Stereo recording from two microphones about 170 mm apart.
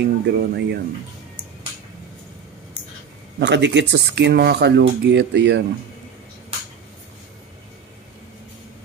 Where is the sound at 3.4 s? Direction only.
90° right.